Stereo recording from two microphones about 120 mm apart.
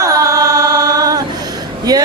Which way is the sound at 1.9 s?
35° right (ahead or behind).